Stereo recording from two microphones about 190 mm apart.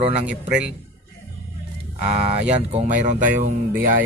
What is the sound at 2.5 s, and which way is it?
A man's voice, 35° right (ahead or behind).